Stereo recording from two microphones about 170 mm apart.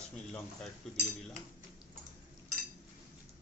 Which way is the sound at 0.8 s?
5° left (ahead or behind).